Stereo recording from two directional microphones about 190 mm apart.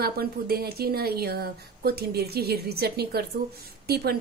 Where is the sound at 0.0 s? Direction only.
55° right (ahead or behind).